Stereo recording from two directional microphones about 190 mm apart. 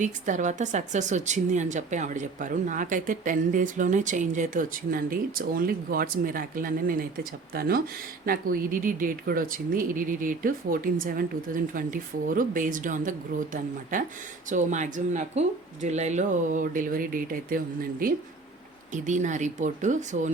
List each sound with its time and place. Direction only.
0.0 s speech: 40° right (ahead or behind)
18.9 s speech: 40° right (ahead or behind)